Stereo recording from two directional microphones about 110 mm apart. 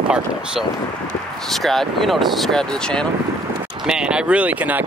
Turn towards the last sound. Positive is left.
turn(degrees=-15)  # may be behind; listen again after turning